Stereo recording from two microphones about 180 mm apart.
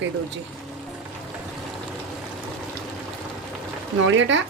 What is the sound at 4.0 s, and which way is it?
Speech, 90° right.